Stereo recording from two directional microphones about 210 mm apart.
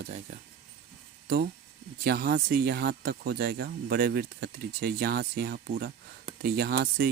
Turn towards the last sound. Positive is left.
turn(degrees=-45)  # may be behind; listen again after turning